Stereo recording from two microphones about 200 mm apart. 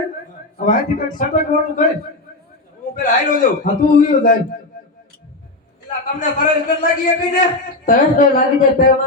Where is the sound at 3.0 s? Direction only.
40° left (ahead or behind).